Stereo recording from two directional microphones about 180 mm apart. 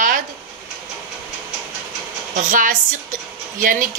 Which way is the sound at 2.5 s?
50° right (ahead or behind).